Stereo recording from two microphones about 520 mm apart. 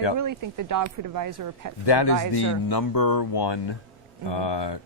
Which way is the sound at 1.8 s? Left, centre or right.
Left.